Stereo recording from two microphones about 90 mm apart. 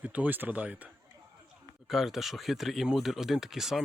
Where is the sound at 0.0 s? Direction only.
15° right (ahead or behind).